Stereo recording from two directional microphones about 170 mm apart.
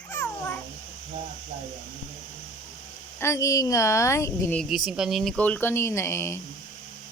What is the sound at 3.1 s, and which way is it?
Speech, 15° left (ahead or behind).